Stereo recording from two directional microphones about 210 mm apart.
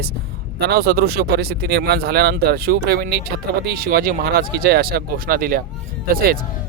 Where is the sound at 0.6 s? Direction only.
50° right (ahead or behind).